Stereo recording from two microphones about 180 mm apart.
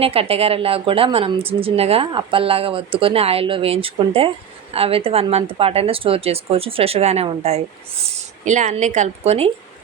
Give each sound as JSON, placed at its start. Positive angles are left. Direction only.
{"t": 0.0, "sound": "speech", "side_deg": -35}